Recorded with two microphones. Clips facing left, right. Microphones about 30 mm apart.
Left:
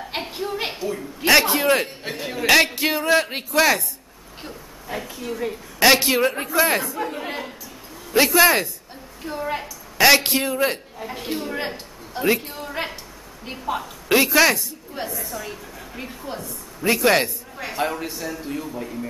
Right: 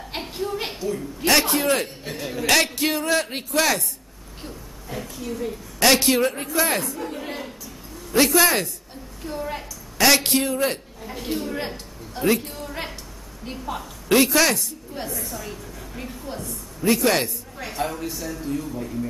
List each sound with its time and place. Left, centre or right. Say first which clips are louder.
0.1 s a sound: even; centre
1.6 s a man's voice: left 3 dB; centre
7.1 s a woman's voice: left 2 dB; centre
10.2 s a man's voice: left 1 dB; centre
15.0 s a man's voice: left 1 dB; centre